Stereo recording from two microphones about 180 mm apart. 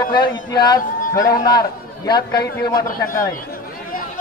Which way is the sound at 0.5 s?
25° left (ahead or behind).